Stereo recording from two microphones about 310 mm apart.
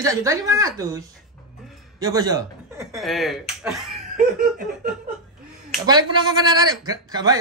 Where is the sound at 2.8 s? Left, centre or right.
Centre.